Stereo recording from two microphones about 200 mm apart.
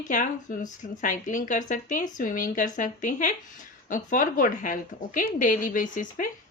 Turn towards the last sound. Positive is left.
turn(degrees=40)  # may be behind; listen again after turning